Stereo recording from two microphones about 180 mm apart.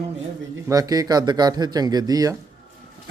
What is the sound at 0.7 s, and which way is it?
Speech, 20° right (ahead or behind).